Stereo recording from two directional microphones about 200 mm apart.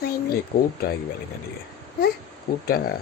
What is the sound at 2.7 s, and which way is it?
Speech, 50° left (ahead or behind).